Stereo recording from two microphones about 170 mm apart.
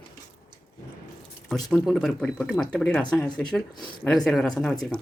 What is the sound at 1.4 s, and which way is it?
Speech, centre (ahead or behind).